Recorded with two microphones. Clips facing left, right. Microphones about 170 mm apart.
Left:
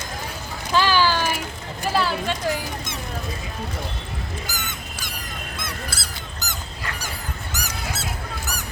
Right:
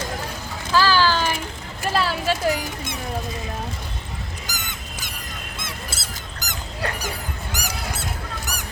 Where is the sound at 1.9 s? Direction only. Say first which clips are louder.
Right 1 dB; centre (ahead or behind).